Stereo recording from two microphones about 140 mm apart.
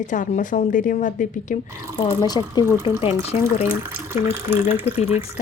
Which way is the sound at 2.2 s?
30° left (ahead or behind).